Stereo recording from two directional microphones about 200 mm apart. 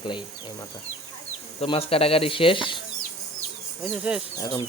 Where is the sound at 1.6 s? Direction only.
30° left (ahead or behind).